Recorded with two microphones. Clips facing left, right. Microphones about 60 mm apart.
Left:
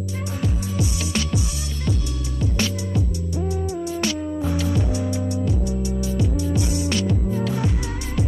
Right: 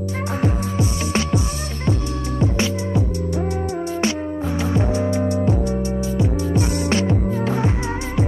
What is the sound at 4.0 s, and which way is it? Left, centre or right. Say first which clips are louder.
Music: right 1 dB; right.